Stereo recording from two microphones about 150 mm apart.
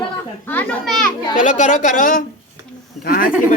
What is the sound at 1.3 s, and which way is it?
A woman's voice, 55° left (ahead or behind).